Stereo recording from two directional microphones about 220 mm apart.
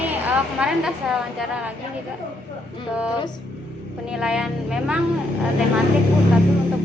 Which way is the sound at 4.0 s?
5° right (ahead or behind).